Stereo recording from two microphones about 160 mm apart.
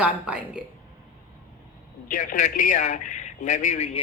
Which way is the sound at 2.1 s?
55° left (ahead or behind).